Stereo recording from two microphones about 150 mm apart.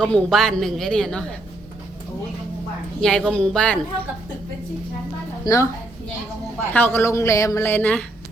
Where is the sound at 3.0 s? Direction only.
5° left (ahead or behind).